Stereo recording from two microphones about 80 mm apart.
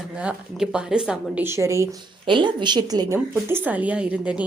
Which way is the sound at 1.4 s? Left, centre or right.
Right.